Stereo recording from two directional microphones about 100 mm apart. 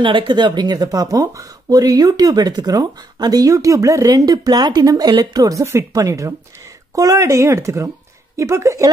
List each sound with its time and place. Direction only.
0.0 s speech: 55° right (ahead or behind); by 8.9 s 30° right (ahead or behind)